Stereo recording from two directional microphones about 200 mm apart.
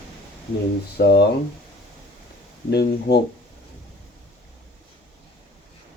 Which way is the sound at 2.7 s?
55° left (ahead or behind).